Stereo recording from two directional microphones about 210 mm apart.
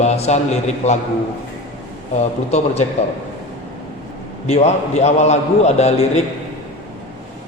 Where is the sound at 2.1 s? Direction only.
30° left (ahead or behind).